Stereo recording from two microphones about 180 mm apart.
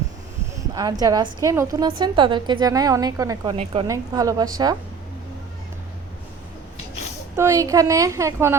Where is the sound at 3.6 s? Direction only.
30° right (ahead or behind).